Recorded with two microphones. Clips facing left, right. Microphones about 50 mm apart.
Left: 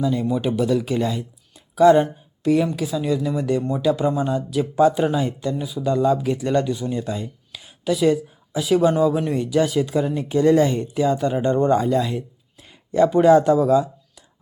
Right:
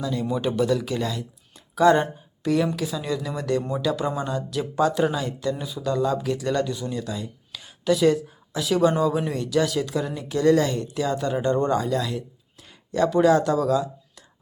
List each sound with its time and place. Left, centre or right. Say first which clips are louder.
0.0 s speech: left 4 dB; centre
1.5 s a sound: left 4 dB; centre
2.7 s speech: left 5 dB; centre
5.5 s speech: left 5 dB; centre
5.8 s speech: left 5 dB; centre
6.9 s speech: left 4 dB; left
7.5 s speech: right 1 dB; centre
9.3 s speech: left 3 dB; centre